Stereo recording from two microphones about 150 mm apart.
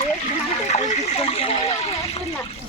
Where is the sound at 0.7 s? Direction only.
45° left (ahead or behind).